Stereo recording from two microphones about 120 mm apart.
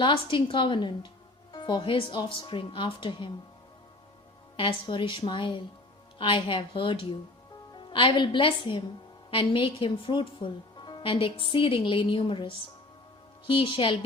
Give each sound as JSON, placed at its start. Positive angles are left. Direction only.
{"t": 0.0, "sound": "speech", "side_deg": 45}
{"t": 4.5, "sound": "speech", "side_deg": 45}